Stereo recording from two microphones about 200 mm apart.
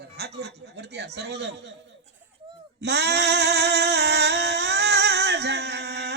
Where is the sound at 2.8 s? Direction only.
60° right (ahead or behind).